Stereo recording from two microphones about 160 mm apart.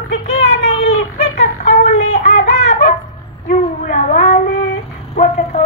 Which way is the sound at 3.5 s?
40° left (ahead or behind).